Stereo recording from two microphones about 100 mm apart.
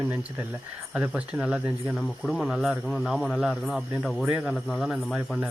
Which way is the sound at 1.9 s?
Centre (ahead or behind).